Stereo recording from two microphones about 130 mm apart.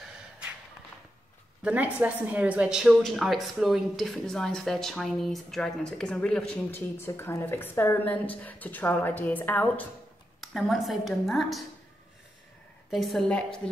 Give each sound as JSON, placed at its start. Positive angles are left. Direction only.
{"t": 0.0, "sound": "a sound", "side_deg": -10}
{"t": 1.6, "sound": "a woman's voice", "side_deg": -10}
{"t": 7.1, "sound": "a woman's voice", "side_deg": 20}
{"t": 10.4, "sound": "a woman's voice", "side_deg": 0}
{"t": 12.9, "sound": "a woman's voice", "side_deg": 0}